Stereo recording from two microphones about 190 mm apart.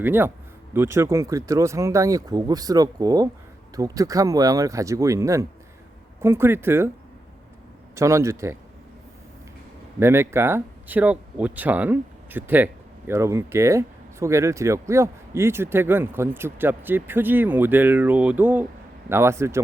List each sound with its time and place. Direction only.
0.0 s speech: 10° right (ahead or behind)
7.9 s speech: 15° right (ahead or behind)
10.0 s speech: 15° right (ahead or behind)